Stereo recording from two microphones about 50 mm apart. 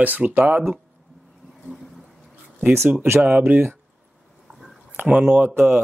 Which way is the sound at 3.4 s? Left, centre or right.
Right.